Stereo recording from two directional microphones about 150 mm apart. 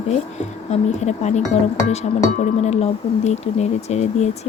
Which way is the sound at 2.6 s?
45° left (ahead or behind).